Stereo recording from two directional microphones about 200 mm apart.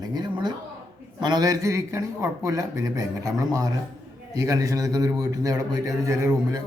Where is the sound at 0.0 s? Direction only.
20° right (ahead or behind).